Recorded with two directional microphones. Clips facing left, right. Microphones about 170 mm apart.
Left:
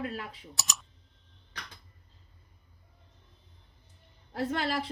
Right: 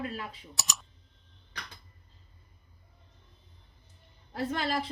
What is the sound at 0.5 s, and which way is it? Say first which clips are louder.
Typing: even; centre (ahead or behind).